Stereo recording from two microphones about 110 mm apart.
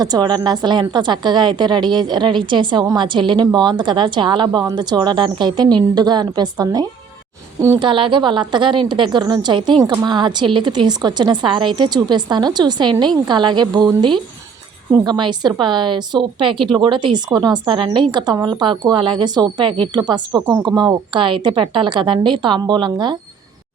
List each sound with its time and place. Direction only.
0.0 s a woman's voice: 40° right (ahead or behind)